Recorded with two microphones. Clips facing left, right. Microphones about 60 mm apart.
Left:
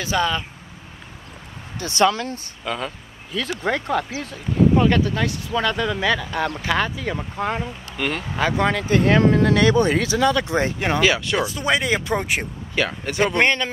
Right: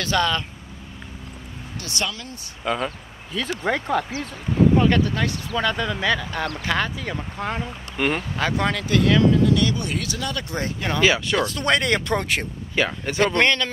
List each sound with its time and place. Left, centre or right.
0.0 s speech: centre
1.8 s speech: left
2.0 s speech: left
2.6 s speech: centre
4.7 s speech: centre
5.0 s speech: centre
5.6 s speech: centre
8.0 s speech: centre
8.4 s speech: centre
8.8 s speech: left
10.0 s speech: left
11.0 s speech: centre
12.7 s speech: centre
13.2 s speech: centre